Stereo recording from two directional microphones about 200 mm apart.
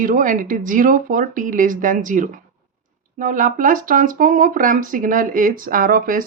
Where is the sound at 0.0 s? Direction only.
40° right (ahead or behind).